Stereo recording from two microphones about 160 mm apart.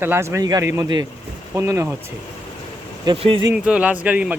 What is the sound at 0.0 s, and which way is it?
A man's voice, 15° right (ahead or behind).